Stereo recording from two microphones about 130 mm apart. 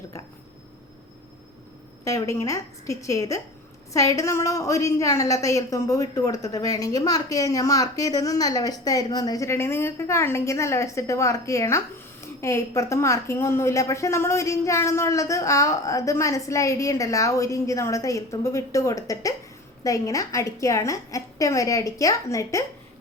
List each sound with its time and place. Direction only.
2.0 s a woman's voice: 25° left (ahead or behind)